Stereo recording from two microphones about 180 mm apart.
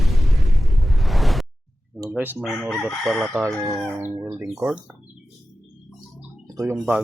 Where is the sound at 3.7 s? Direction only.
Centre (ahead or behind).